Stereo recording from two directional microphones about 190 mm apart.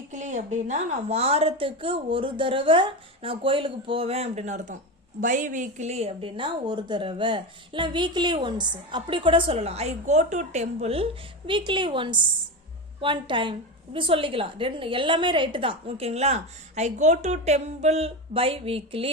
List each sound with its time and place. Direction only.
0.1 s a woman's voice: 40° right (ahead or behind)